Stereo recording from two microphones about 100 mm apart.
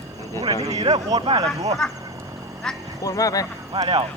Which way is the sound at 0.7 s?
90° right.